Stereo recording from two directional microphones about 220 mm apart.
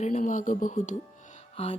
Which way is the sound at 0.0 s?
35° left (ahead or behind).